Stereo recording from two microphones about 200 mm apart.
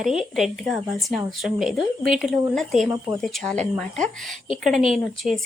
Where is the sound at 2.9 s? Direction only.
15° right (ahead or behind).